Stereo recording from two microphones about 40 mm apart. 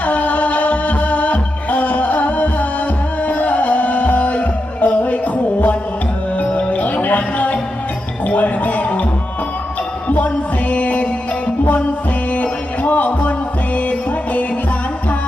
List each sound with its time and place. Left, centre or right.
0.0 s music: left
10.1 s music: left
12.3 s music: left